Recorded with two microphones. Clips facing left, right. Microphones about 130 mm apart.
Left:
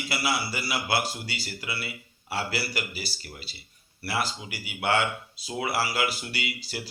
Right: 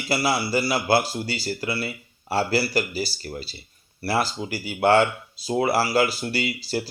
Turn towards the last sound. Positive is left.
turn(degrees=-40)  # may be behind; listen again after turning